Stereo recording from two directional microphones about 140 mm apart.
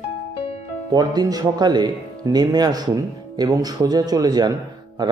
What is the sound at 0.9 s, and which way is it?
A man's voice, 30° right (ahead or behind).